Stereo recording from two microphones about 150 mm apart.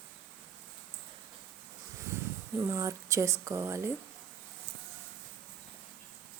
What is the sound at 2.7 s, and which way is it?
Speech, 20° right (ahead or behind).